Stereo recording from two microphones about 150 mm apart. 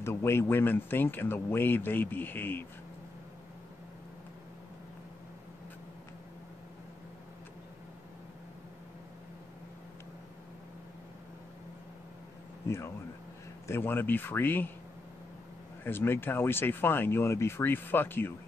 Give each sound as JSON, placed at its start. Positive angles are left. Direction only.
{"t": 0.0, "sound": "speech", "side_deg": 15}
{"t": 12.6, "sound": "speech", "side_deg": 20}
{"t": 15.8, "sound": "speech", "side_deg": 15}